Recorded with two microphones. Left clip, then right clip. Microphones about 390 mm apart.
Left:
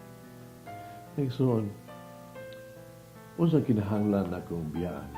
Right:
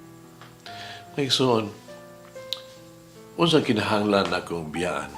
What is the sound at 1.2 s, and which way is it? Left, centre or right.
Speech, centre.